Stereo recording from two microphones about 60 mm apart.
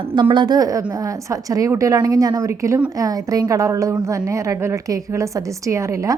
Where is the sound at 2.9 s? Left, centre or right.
Right.